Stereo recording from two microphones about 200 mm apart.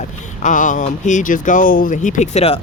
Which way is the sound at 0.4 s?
40° left (ahead or behind).